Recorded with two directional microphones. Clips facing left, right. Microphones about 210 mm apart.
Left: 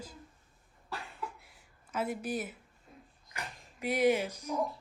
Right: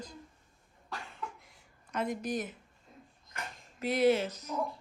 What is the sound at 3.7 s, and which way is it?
Speech, 10° left (ahead or behind).